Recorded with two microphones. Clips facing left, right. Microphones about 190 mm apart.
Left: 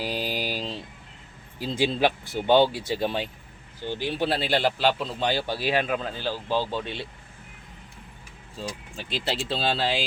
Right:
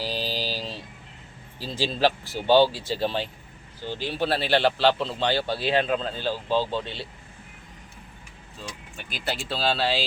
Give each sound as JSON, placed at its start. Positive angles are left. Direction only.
{"t": 0.0, "sound": "mantra", "side_deg": 15}
{"t": 1.5, "sound": "a man's voice", "side_deg": 15}
{"t": 8.5, "sound": "speech", "side_deg": 30}